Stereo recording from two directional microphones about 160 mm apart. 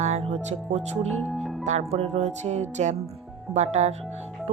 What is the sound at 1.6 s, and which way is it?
Speech, 45° right (ahead or behind).